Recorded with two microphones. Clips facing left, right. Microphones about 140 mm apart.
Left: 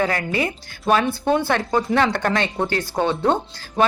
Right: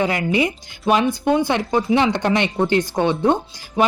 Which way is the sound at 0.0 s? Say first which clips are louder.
Right 3 dB; 15° right (ahead or behind).